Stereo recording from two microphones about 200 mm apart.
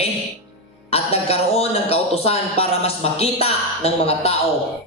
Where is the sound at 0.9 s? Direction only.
30° left (ahead or behind).